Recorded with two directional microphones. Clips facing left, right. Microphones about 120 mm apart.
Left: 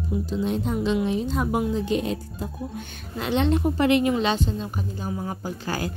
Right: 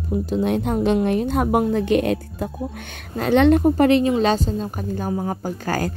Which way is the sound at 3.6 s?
40° right (ahead or behind).